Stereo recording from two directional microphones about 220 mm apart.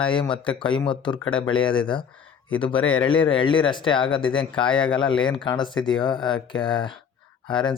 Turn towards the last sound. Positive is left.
turn(degrees=20)  # may be behind; listen again after turning